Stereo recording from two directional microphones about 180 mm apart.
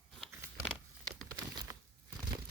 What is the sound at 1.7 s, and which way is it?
Crumpling, 20° right (ahead or behind).